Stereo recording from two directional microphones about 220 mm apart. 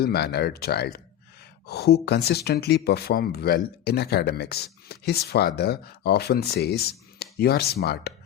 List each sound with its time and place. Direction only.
0.0 s speech: 45° left (ahead or behind)